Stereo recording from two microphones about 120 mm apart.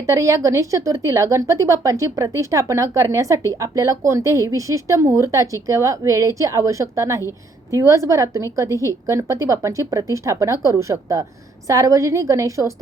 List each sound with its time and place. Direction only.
0.0 s a woman's voice: 25° right (ahead or behind)